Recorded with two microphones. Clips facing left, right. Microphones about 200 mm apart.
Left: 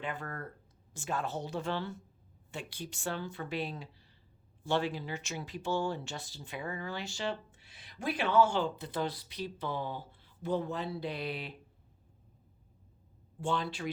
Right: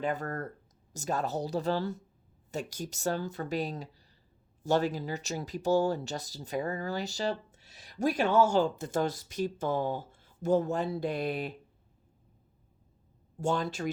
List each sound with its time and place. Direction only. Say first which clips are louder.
0.0 s speech: right 7 dB; 40° right (ahead or behind)
13.4 s speech: right 4 dB; 45° right (ahead or behind)